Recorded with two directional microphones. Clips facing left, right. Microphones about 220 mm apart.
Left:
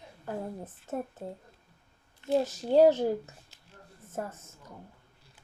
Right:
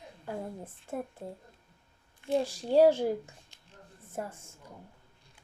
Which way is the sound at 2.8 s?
10° right (ahead or behind).